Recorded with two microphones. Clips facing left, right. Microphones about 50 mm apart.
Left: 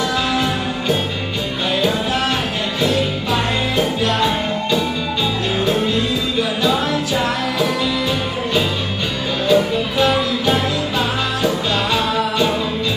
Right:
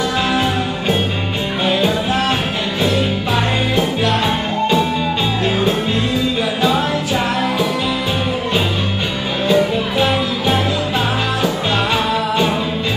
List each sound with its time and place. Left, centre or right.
9.5 s music: centre